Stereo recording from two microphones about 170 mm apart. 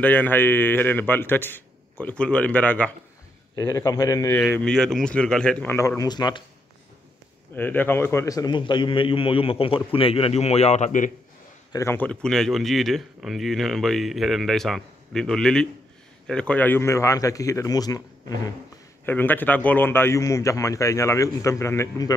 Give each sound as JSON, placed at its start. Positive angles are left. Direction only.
{"t": 0.0, "sound": "a man's voice", "side_deg": 10}
{"t": 4.4, "sound": "a man's voice", "side_deg": 5}
{"t": 7.5, "sound": "a man's voice", "side_deg": 10}
{"t": 11.7, "sound": "a man's voice", "side_deg": 15}
{"t": 19.0, "sound": "a man's voice", "side_deg": 10}